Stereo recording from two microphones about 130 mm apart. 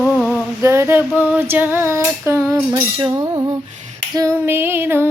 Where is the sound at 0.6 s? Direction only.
20° right (ahead or behind).